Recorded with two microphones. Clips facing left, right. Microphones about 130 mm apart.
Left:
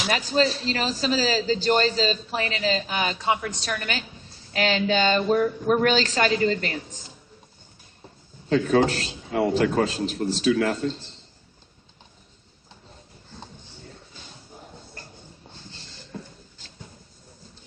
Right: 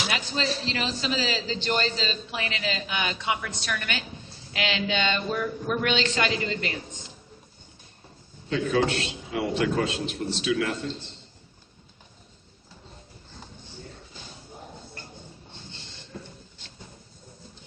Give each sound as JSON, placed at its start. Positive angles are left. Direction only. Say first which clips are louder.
{"t": 0.1, "sound": "a man's voice", "louder": "left 6 dB", "side_deg": 40}
{"t": 8.4, "sound": "a man's voice", "louder": "left 4 dB", "side_deg": 40}